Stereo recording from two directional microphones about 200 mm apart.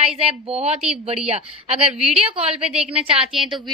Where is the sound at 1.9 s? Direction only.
5° right (ahead or behind).